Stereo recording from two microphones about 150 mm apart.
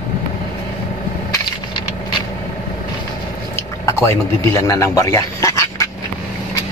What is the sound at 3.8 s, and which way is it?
A man's voice, 20° left (ahead or behind).